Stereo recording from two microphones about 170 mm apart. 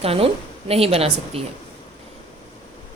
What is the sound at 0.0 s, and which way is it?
A woman's voice, 35° right (ahead or behind).